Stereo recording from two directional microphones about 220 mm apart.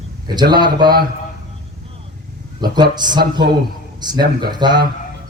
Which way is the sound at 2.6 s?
20° right (ahead or behind).